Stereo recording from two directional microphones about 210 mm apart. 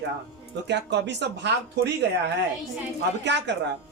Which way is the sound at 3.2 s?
55° right (ahead or behind).